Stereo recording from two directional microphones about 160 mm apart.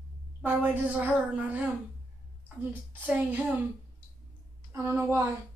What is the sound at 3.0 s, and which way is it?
Speech, 10° right (ahead or behind).